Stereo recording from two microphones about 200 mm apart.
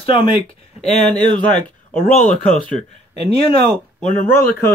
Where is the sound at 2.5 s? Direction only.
35° left (ahead or behind).